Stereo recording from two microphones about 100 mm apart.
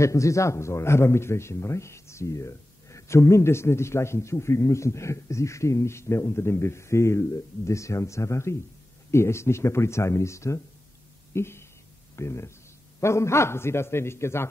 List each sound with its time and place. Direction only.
0.0 s a man's voice: 30° left (ahead or behind)